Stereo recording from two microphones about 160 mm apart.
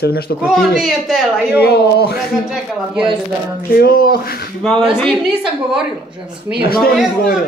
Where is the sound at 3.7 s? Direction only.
65° left (ahead or behind).